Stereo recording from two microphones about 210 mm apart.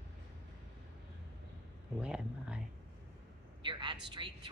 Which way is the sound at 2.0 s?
5° right (ahead or behind).